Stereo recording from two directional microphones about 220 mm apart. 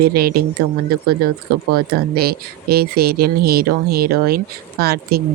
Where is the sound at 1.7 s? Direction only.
45° right (ahead or behind).